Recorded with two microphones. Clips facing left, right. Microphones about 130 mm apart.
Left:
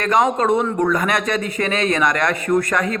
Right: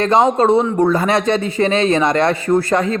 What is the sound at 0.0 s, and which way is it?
A man's voice, 30° right (ahead or behind).